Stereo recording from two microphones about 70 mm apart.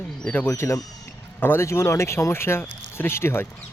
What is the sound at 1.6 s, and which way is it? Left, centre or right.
Speech, left.